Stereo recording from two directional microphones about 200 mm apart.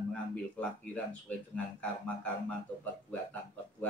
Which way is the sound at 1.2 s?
5° left (ahead or behind).